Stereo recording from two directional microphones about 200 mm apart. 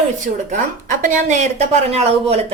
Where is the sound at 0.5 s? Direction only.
40° right (ahead or behind).